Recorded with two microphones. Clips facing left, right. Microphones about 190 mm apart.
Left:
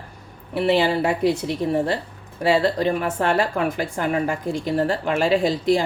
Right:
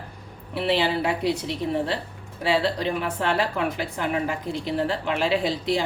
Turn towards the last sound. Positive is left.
turn(degrees=50)  # may be behind; listen again after turning